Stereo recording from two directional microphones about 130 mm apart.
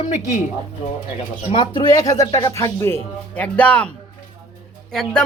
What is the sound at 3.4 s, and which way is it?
Speech, 10° left (ahead or behind).